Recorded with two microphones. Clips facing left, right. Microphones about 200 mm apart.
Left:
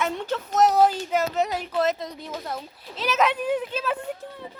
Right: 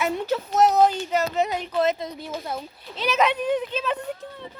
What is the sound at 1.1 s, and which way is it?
A woman's voice, 5° left (ahead or behind).